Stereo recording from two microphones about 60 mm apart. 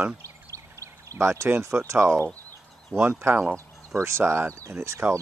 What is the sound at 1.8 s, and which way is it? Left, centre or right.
Speech, right.